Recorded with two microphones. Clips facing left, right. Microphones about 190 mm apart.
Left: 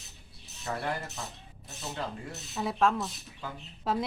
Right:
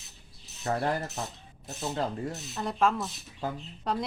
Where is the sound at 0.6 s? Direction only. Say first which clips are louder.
Right 5 dB; 45° right (ahead or behind).